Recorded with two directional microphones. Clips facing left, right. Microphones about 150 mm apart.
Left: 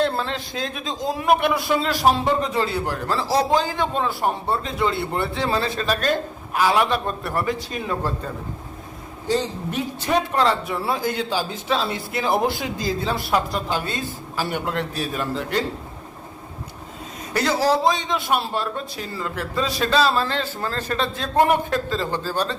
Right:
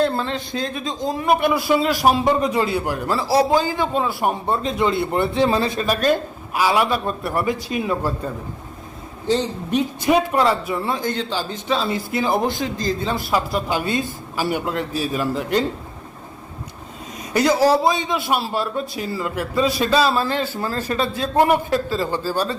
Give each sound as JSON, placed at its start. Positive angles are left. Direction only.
{"t": 0.0, "sound": "a man's voice", "side_deg": 0}
{"t": 4.4, "sound": "a man's voice", "side_deg": -20}
{"t": 9.2, "sound": "a man's voice", "side_deg": -20}
{"t": 10.8, "sound": "a man's voice", "side_deg": 5}
{"t": 14.6, "sound": "a man's voice", "side_deg": 0}
{"t": 17.3, "sound": "a man's voice", "side_deg": -15}